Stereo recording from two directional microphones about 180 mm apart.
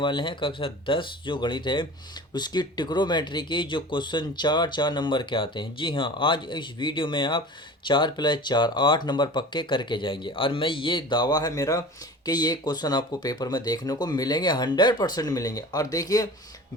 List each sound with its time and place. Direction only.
0.0 s speech: 25° left (ahead or behind)